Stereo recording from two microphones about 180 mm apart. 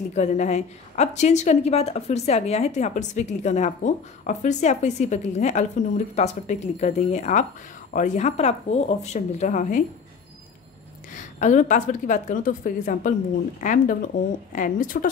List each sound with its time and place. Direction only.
0.1 s a woman's voice: 40° left (ahead or behind)
11.1 s a woman's voice: 45° left (ahead or behind)